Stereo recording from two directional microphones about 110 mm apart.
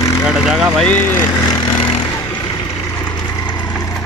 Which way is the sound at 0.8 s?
15° left (ahead or behind).